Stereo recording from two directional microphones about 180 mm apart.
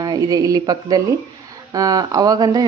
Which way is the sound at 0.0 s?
20° right (ahead or behind).